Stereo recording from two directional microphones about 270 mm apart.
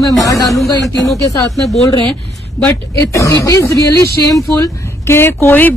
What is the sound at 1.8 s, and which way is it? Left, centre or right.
Speech, centre.